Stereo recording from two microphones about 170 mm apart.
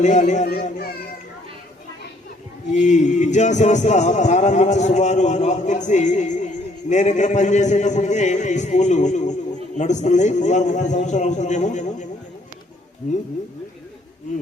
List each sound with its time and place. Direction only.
0.0 s speech: 45° left (ahead or behind)
2.7 s speech: 45° left (ahead or behind)
14.3 s speech: 45° left (ahead or behind)